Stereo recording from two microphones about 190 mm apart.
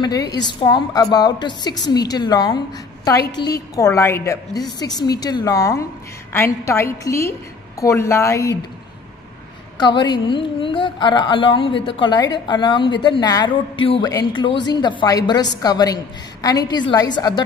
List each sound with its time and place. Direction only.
0.0 s a woman's voice: 20° left (ahead or behind)
9.8 s a woman's voice: 25° left (ahead or behind)